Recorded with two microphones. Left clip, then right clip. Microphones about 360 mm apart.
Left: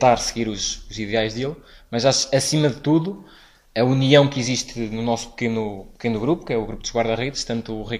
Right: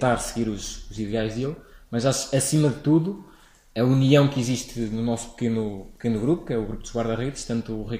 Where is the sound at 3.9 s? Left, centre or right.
Centre.